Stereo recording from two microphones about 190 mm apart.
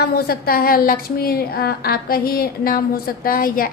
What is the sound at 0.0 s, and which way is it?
A woman's voice, 55° left (ahead or behind).